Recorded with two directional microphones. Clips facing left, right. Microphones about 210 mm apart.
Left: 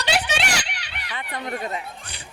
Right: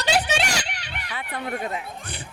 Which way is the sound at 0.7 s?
45° right (ahead or behind).